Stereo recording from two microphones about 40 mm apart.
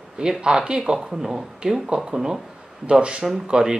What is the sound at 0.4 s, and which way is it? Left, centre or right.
Speech, centre.